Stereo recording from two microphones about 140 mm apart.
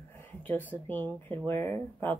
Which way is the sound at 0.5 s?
15° left (ahead or behind).